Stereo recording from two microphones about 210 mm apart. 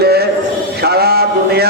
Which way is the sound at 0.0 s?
50° right (ahead or behind).